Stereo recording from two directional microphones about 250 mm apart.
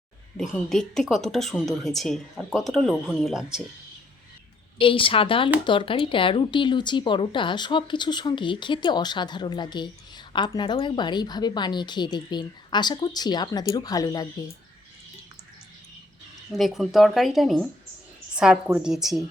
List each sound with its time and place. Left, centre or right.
0.3 s speech: centre
4.8 s a woman's voice: left
16.5 s speech: centre